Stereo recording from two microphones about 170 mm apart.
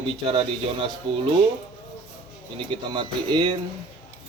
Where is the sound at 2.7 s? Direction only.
30° right (ahead or behind).